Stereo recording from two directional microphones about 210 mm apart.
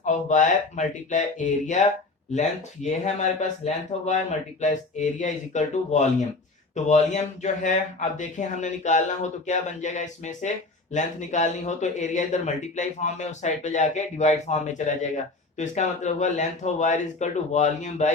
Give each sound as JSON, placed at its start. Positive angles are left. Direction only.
{"t": 0.0, "sound": "speech", "side_deg": 35}